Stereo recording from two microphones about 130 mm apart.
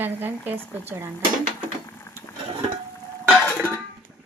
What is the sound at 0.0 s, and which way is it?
Speech, 15° right (ahead or behind).